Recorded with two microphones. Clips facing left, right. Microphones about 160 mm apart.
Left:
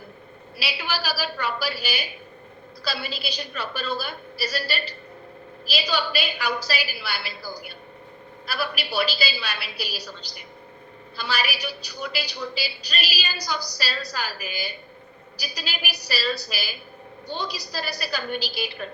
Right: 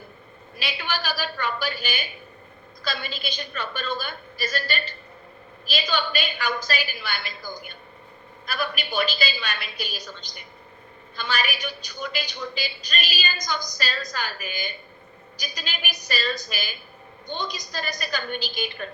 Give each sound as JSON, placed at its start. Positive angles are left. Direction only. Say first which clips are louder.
{"t": 0.5, "sound": "a woman's voice", "louder": "even", "side_deg": 5}
{"t": 10.0, "sound": "a woman's voice", "louder": "left 1 dB", "side_deg": 35}
{"t": 11.2, "sound": "a woman's voice", "louder": "even", "side_deg": 5}
{"t": 17.3, "sound": "a woman's voice", "louder": "even", "side_deg": 35}
{"t": 17.7, "sound": "a woman's voice", "louder": "even", "side_deg": 5}